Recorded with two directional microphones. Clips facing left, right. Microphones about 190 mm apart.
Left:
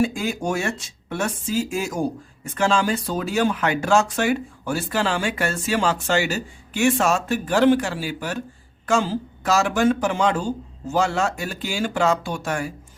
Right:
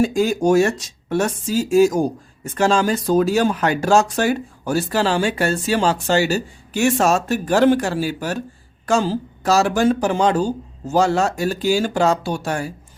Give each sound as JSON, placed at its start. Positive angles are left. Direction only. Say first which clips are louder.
{"t": 0.0, "sound": "speech", "louder": "right 6 dB", "side_deg": -40}